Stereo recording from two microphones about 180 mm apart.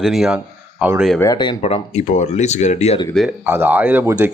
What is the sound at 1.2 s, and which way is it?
Speech, 20° left (ahead or behind).